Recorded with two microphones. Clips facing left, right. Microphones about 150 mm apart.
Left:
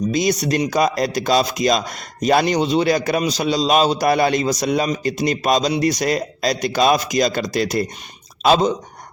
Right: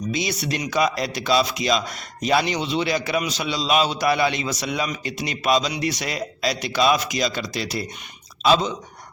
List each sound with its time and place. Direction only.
0.1 s a man's voice: 40° left (ahead or behind)